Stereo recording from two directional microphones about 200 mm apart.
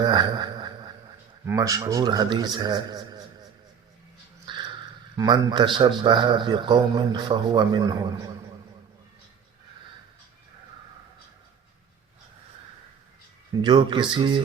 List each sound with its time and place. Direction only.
0.0 s a sound: 20° right (ahead or behind)
1.5 s a man's voice: 15° right (ahead or behind)
4.5 s dog: 25° right (ahead or behind)
5.1 s a man's voice: 20° right (ahead or behind)
13.6 s a man's voice: 25° right (ahead or behind)